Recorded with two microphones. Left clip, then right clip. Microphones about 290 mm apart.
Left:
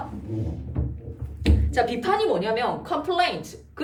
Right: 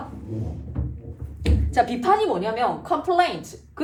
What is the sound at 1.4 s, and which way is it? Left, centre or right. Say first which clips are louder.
Speech: right 2 dB; centre.